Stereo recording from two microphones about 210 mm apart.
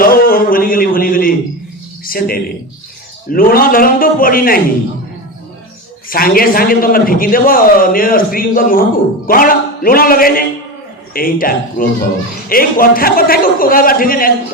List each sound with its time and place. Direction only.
0.0 s a sound: 45° left (ahead or behind)
2.0 s a man's voice: 45° left (ahead or behind)
6.1 s a man's voice: 45° left (ahead or behind)